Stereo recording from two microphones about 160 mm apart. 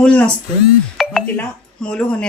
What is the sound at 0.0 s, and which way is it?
Speech, 5° left (ahead or behind).